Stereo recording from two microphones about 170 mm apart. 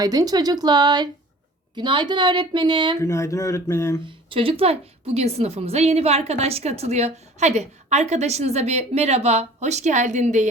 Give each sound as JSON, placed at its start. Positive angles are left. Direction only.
{"t": 0.0, "sound": "a woman's voice", "side_deg": -20}
{"t": 3.0, "sound": "speech", "side_deg": 15}
{"t": 4.3, "sound": "a woman's voice", "side_deg": -30}